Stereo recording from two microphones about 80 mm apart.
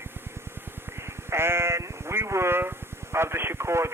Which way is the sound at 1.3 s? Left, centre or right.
Right.